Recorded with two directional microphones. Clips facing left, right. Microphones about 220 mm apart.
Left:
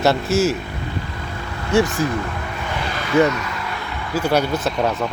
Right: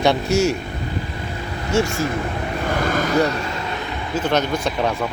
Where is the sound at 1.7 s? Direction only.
15° left (ahead or behind).